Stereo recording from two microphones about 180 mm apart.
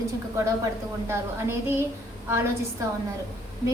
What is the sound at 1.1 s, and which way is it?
Speech, 15° right (ahead or behind).